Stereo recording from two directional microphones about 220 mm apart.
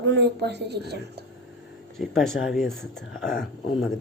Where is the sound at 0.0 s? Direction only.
50° right (ahead or behind).